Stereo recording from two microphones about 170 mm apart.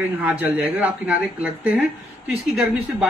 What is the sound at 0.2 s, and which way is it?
A man's voice, 5° right (ahead or behind).